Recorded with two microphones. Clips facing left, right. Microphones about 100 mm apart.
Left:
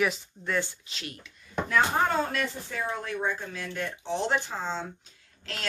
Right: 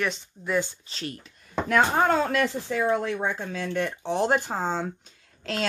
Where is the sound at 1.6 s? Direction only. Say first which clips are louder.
Right 4 dB; 70° right (ahead or behind).